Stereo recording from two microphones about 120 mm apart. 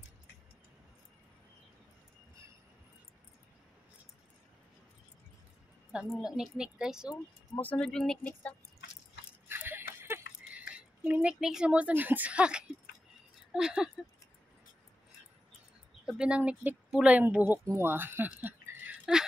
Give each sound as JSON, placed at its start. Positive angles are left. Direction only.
{"t": 5.9, "sound": "a woman's voice", "side_deg": -5}
{"t": 7.8, "sound": "speech", "side_deg": 5}
{"t": 9.5, "sound": "a sound", "side_deg": -20}
{"t": 13.5, "sound": "speech", "side_deg": -5}
{"t": 16.1, "sound": "speech", "side_deg": -10}
{"t": 18.4, "sound": "a sound", "side_deg": -15}